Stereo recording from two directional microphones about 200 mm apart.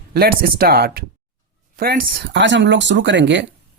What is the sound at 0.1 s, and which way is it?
Speech, 50° right (ahead or behind).